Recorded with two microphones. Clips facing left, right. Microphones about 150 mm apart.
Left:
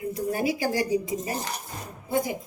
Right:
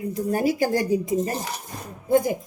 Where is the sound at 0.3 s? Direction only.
45° right (ahead or behind).